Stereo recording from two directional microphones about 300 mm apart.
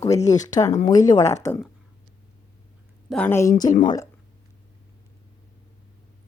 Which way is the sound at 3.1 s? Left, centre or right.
Centre.